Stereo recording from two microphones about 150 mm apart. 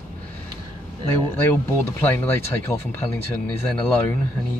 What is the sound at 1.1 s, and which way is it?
Speech, 10° left (ahead or behind).